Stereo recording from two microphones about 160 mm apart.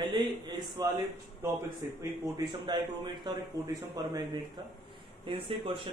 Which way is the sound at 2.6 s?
30° right (ahead or behind).